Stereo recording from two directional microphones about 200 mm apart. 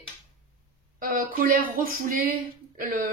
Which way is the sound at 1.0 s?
45° right (ahead or behind).